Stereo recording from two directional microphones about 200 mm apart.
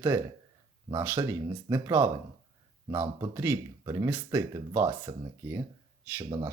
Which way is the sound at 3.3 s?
15° right (ahead or behind).